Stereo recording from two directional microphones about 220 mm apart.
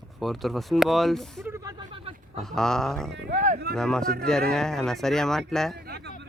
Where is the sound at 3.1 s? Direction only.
50° right (ahead or behind).